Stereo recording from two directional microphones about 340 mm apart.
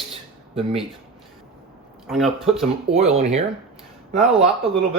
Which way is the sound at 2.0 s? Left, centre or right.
Centre.